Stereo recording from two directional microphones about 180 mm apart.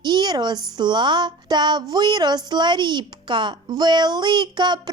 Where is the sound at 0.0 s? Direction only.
25° right (ahead or behind).